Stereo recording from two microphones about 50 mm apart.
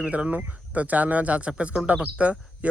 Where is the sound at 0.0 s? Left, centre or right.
Right.